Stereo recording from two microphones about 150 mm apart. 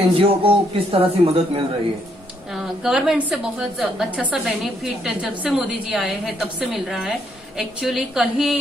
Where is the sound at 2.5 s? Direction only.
Centre (ahead or behind).